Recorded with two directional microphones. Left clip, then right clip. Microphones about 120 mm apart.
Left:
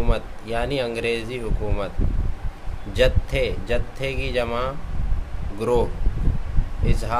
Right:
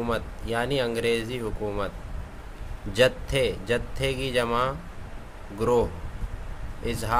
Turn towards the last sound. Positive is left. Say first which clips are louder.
# even
turn(degrees=-25)  # may be behind; listen again after turning